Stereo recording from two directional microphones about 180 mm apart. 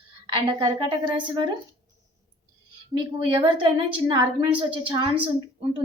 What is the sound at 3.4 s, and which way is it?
A woman's voice, 25° right (ahead or behind).